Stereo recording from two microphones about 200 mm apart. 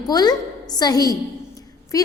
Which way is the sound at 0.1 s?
20° left (ahead or behind).